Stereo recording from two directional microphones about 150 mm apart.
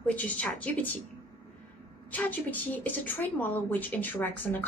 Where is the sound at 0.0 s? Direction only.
10° left (ahead or behind).